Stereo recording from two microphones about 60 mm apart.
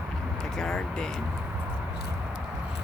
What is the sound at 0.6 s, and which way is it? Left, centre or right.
Speech, centre.